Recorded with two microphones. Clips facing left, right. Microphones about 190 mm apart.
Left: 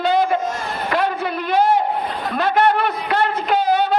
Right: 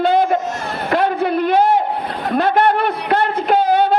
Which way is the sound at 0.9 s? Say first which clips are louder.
Right 5 dB; 55° right (ahead or behind).